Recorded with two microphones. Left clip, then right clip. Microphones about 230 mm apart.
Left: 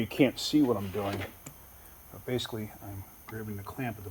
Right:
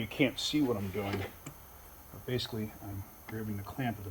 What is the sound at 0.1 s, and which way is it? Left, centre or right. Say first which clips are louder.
Speech: left 4 dB; left.